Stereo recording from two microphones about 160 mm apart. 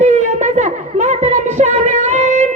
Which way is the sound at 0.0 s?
45° right (ahead or behind).